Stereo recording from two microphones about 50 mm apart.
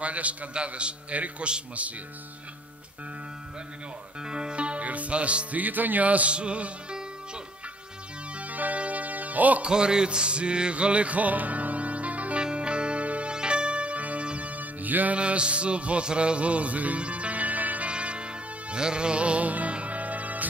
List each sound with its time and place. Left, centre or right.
0.0 s a man's voice: right
4.2 s music: centre
8.4 s music: right
9.7 s music: centre; by 15.1 s right
15.1 s music: right